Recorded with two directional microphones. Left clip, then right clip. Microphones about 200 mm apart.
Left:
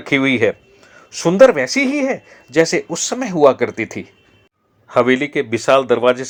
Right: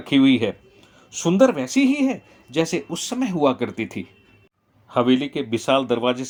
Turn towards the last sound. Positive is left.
turn(degrees=15)  # may be behind; listen again after turning